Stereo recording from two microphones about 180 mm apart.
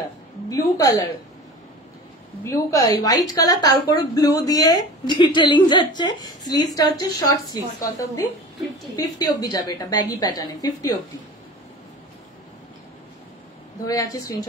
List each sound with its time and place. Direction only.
0.5 s a woman's voice: 20° left (ahead or behind)
2.4 s a woman's voice: 15° left (ahead or behind)
13.8 s a woman's voice: 20° left (ahead or behind)